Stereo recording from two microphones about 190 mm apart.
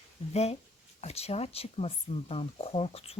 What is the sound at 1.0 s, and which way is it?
Speech, 35° left (ahead or behind).